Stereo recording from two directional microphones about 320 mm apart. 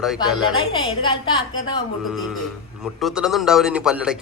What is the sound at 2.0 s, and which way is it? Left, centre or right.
A man's voice, centre.